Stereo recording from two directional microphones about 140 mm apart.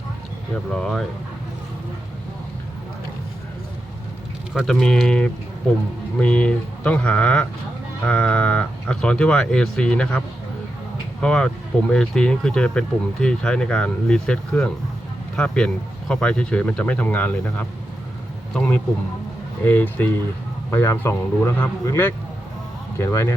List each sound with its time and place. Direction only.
0.7 s speech: 5° left (ahead or behind)
4.5 s speech: 5° left (ahead or behind); by 23.3 s 20° left (ahead or behind)